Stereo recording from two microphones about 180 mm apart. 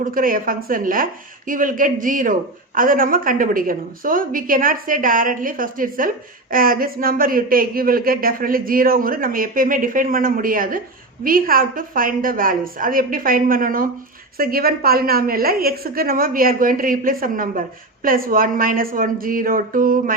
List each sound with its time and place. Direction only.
0.0 s a woman's voice: 50° right (ahead or behind)